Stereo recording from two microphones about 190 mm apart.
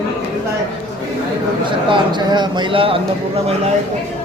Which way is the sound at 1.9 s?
25° right (ahead or behind).